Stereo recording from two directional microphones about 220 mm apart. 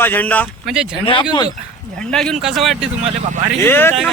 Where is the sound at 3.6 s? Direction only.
10° left (ahead or behind).